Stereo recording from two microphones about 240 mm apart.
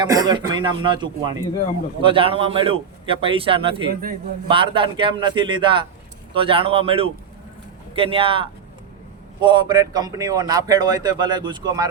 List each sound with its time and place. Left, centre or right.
0.0 s a man's voice: centre